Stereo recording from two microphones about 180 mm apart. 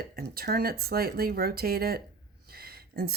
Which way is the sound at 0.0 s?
60° right (ahead or behind).